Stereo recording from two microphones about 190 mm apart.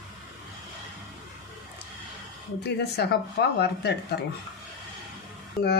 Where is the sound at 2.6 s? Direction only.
60° left (ahead or behind).